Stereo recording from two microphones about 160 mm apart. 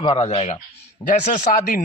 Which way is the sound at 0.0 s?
40° left (ahead or behind).